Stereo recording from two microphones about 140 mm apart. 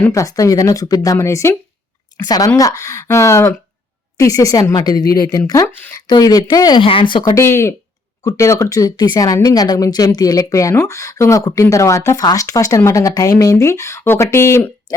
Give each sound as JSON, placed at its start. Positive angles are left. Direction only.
{"t": 0.1, "sound": "speech", "side_deg": 25}
{"t": 7.3, "sound": "speech", "side_deg": 20}